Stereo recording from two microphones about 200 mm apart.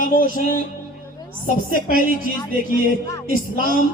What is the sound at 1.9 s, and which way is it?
Speech, 45° left (ahead or behind).